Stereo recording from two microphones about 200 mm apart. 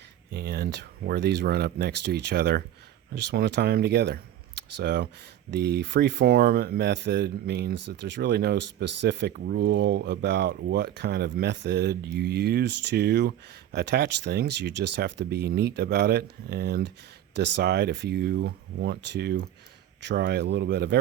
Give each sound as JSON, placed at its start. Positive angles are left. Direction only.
{"t": 0.3, "sound": "speech", "side_deg": -50}